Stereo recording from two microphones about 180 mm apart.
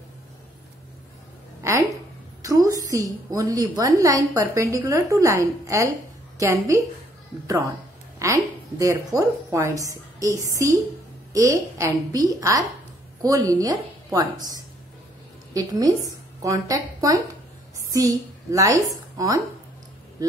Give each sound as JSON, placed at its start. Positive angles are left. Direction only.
{"t": 1.6, "sound": "a woman's voice", "side_deg": -15}
{"t": 8.2, "sound": "a woman's voice", "side_deg": -15}
{"t": 11.3, "sound": "a woman's voice", "side_deg": -20}
{"t": 20.2, "sound": "a sound", "side_deg": -20}